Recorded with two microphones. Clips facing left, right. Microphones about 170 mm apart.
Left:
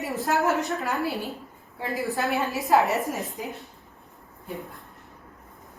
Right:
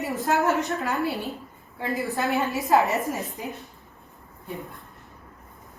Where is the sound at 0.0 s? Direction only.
Centre (ahead or behind).